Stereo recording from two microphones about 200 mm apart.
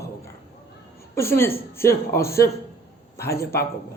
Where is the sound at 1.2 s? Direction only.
10° left (ahead or behind).